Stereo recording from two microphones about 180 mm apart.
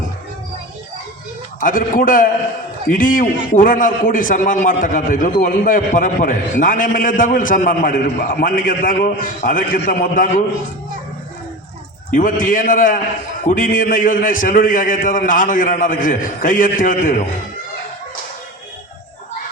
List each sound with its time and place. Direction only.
1.6 s a man's voice: 50° left (ahead or behind)
12.1 s a man's voice: 50° left (ahead or behind)